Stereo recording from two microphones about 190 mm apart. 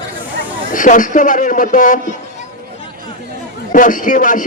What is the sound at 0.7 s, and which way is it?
Speech, 45° left (ahead or behind).